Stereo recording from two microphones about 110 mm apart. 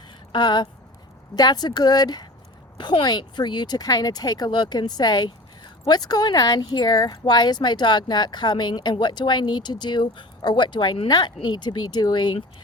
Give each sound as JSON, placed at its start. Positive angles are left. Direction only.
{"t": 0.3, "sound": "speech", "side_deg": 45}